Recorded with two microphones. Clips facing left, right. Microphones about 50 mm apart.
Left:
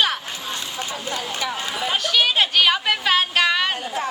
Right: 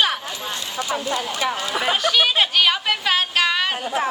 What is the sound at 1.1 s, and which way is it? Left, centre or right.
Speech, right.